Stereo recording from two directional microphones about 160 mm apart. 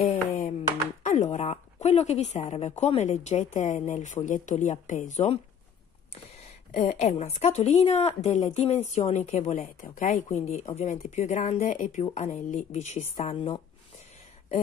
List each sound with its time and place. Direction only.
0.0 s a sound: 45° left (ahead or behind)
1.0 s speech: 50° left (ahead or behind)
6.4 s speech: 45° left (ahead or behind)